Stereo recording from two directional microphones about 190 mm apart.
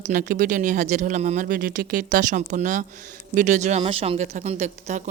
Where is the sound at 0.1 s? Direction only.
45° right (ahead or behind).